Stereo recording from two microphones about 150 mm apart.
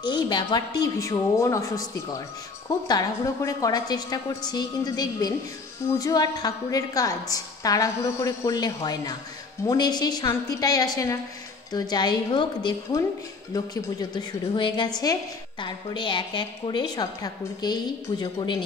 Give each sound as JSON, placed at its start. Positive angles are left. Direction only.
{"t": 0.0, "sound": "a woman's voice", "side_deg": 30}